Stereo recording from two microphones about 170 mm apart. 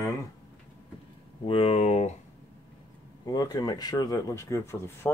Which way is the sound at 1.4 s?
35° left (ahead or behind).